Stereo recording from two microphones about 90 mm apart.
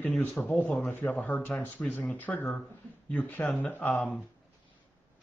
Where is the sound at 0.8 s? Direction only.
25° left (ahead or behind).